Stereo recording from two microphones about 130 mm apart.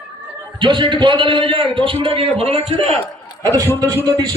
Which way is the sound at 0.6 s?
40° right (ahead or behind).